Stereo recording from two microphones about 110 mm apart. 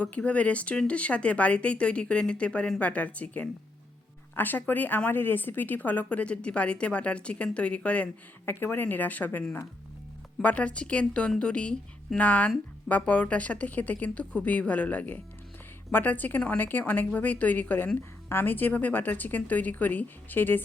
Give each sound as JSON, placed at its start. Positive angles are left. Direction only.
{"t": 0.0, "sound": "a woman's voice", "side_deg": 10}